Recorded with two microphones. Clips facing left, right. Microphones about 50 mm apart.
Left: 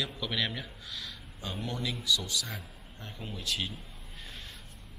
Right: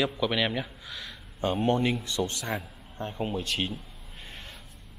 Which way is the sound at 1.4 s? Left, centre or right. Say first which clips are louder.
Right 11 dB; right.